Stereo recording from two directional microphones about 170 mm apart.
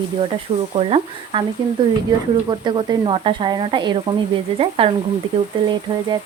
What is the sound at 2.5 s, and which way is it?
Speech, 30° right (ahead or behind).